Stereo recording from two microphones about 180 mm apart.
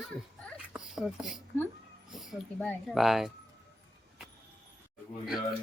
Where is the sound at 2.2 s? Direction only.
Centre (ahead or behind).